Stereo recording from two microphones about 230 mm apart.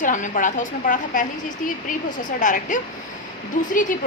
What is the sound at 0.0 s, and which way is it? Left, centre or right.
A woman's voice, left.